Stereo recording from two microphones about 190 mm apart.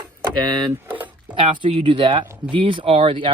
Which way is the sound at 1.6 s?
25° right (ahead or behind).